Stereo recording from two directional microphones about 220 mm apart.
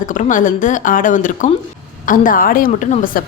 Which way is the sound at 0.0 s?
35° left (ahead or behind).